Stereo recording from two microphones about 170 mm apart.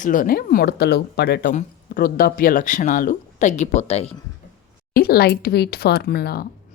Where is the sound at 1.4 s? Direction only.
50° left (ahead or behind).